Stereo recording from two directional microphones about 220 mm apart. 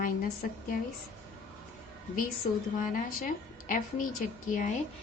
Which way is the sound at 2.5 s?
30° left (ahead or behind).